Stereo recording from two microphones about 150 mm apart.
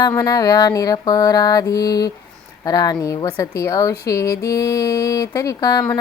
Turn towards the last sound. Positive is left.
turn(degrees=20)  # may be behind; listen again after turning